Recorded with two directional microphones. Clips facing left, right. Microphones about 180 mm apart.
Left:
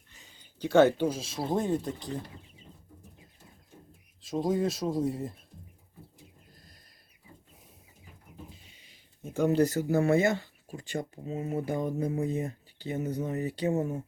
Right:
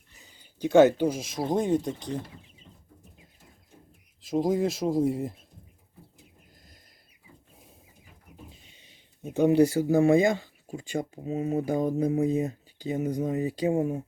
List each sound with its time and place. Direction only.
0.2 s speech: 10° right (ahead or behind)
4.4 s speech: 25° right (ahead or behind)
9.2 s speech: 15° right (ahead or behind)